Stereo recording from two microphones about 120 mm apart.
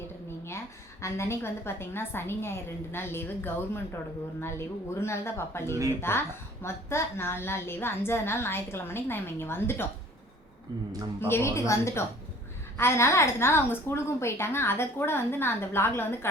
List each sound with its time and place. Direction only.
1.0 s a woman's voice: 20° left (ahead or behind)
11.2 s a woman's voice: 20° left (ahead or behind)